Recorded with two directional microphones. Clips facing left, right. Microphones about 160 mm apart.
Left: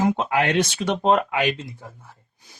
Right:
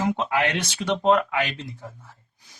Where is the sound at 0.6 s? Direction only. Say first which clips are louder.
Left 4 dB; 45° left (ahead or behind).